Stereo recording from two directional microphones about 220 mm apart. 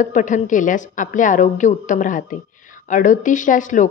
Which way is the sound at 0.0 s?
35° left (ahead or behind).